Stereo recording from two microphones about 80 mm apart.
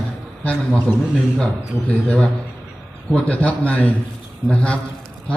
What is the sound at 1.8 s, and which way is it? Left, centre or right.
A man's voice, centre.